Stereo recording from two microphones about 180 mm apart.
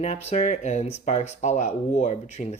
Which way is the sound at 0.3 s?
40° left (ahead or behind).